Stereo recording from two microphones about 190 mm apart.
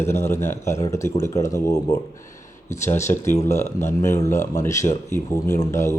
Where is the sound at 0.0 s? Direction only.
15° left (ahead or behind).